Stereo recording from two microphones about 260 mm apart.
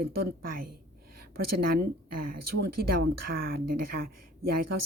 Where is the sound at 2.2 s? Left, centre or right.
Right.